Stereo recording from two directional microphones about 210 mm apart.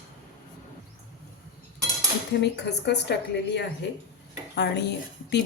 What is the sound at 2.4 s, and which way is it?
A woman's voice, 55° left (ahead or behind).